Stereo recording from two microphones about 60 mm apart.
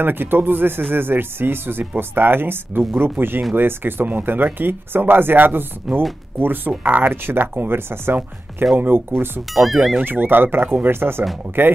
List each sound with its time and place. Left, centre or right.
0.0 s speech: right
9.5 s speech: centre
10.0 s speech: right